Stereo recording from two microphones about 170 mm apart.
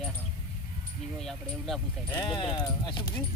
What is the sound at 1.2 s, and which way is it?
Speech, centre (ahead or behind).